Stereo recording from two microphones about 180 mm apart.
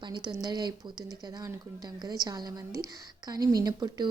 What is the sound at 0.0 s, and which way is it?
A woman's voice, 25° right (ahead or behind).